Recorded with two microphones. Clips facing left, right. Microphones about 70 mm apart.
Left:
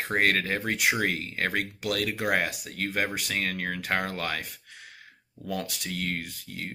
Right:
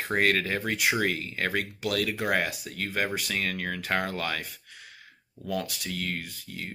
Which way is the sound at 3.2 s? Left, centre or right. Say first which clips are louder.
Even; left.